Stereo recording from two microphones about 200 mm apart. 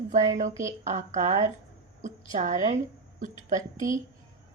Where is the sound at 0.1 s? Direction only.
35° right (ahead or behind).